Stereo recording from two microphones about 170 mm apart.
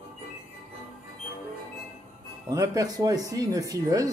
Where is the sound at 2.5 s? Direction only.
20° right (ahead or behind).